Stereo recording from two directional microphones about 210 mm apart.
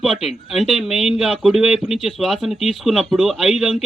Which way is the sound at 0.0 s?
Centre (ahead or behind).